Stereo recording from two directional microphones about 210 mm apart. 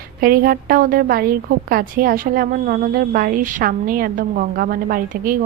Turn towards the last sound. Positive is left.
turn(degrees=-45)  # may be behind; listen again after turning